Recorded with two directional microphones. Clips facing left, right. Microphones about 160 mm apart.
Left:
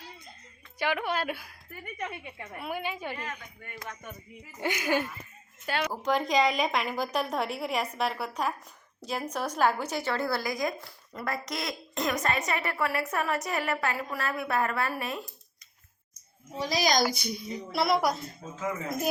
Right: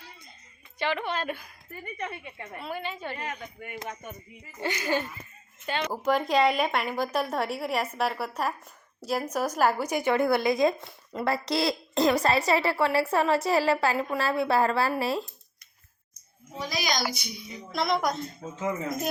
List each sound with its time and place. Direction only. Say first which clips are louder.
0.8 s a woman's voice: even; 10° left (ahead or behind)
3.2 s speech: right 3 dB; 15° right (ahead or behind)
4.6 s a woman's voice: even; 10° left (ahead or behind)
5.9 s a woman's voice: right 3 dB; 5° right (ahead or behind); by 15.3 s 30° right (ahead or behind)
16.6 s a child's voice: left 4 dB; 35° left (ahead or behind)
17.7 s a woman's voice: left 1 dB; 5° left (ahead or behind)